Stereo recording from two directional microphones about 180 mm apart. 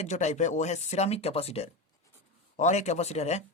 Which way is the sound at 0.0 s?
40° left (ahead or behind).